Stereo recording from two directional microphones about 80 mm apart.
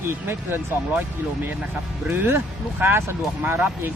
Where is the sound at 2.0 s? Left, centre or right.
Right.